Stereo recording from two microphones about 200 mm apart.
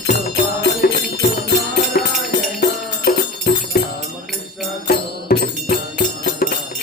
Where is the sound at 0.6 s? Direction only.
50° left (ahead or behind).